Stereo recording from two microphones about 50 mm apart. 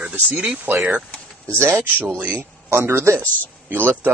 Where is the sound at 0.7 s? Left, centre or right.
Right.